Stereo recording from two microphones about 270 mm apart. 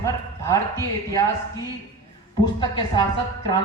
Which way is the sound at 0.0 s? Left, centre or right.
Centre.